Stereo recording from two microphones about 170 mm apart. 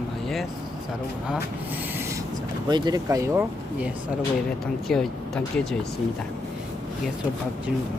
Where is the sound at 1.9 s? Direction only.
15° right (ahead or behind).